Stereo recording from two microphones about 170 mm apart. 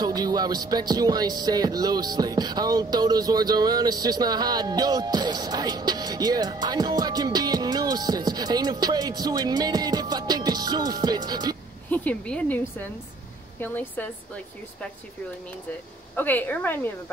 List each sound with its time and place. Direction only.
0.0 s music: 20° right (ahead or behind)
11.9 s a woman's voice: 10° left (ahead or behind)
16.2 s a woman's voice: 10° left (ahead or behind)